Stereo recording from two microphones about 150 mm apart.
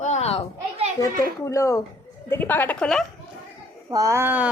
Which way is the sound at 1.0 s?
20° left (ahead or behind).